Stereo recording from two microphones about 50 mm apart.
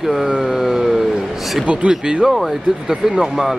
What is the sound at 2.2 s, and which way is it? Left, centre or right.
Speech, centre.